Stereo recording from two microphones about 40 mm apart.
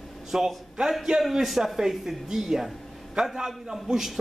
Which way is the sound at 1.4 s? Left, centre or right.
Centre.